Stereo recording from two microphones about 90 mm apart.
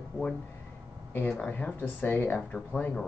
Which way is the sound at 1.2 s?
15° left (ahead or behind).